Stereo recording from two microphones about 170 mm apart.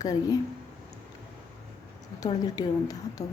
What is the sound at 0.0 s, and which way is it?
Speech, 20° left (ahead or behind).